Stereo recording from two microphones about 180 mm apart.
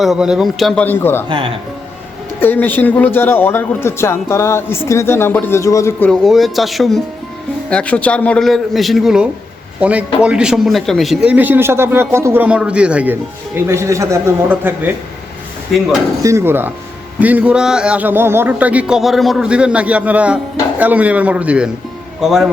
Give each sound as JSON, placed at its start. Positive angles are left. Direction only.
{"t": 0.0, "sound": "a man's voice", "side_deg": -5}
{"t": 1.3, "sound": "speech", "side_deg": -30}
{"t": 2.4, "sound": "a man's voice", "side_deg": 10}
{"t": 6.1, "sound": "a man's voice", "side_deg": 0}
{"t": 16.2, "sound": "a man's voice", "side_deg": -15}